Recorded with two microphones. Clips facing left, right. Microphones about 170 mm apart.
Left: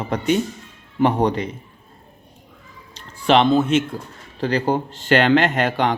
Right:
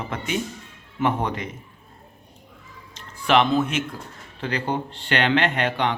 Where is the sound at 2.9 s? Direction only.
30° left (ahead or behind).